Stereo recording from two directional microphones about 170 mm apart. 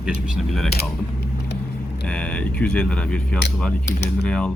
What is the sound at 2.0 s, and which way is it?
Speech, 5° left (ahead or behind).